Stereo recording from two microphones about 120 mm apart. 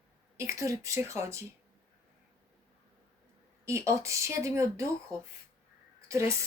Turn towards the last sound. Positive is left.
turn(degrees=-25)  # may be behind; listen again after turning